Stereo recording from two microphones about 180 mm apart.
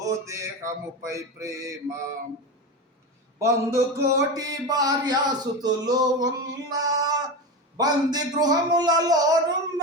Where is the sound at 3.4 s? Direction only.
15° right (ahead or behind).